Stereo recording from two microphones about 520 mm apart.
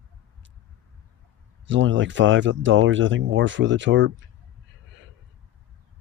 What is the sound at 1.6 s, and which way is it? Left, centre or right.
Speech, right.